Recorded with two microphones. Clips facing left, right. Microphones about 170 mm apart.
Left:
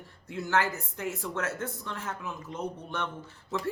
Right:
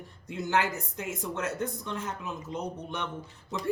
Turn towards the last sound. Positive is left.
turn(degrees=-15)  # may be behind; listen again after turning